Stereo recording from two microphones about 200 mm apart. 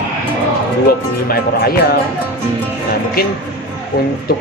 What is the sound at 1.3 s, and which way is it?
Speech, 50° left (ahead or behind).